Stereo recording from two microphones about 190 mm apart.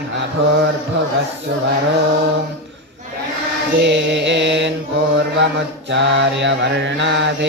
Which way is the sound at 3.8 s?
70° right (ahead or behind).